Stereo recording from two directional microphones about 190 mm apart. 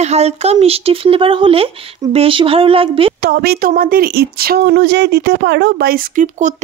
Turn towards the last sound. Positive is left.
turn(degrees=-40)  # may be behind; listen again after turning